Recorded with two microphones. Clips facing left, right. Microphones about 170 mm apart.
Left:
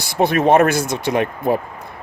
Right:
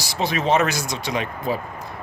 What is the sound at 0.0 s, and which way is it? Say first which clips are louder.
Speech: left 7 dB; 55° left (ahead or behind).